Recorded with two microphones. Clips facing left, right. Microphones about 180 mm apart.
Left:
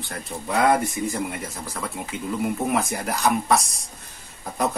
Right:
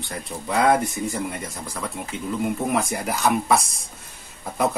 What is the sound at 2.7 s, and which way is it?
Speech, centre (ahead or behind).